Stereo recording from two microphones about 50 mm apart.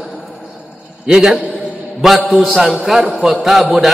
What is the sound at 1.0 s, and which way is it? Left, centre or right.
Speech, centre.